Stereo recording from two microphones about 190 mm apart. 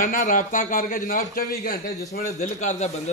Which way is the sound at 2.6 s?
35° left (ahead or behind).